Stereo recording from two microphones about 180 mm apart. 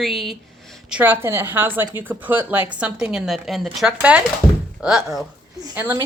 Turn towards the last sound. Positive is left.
turn(degrees=-10)  # may be behind; listen again after turning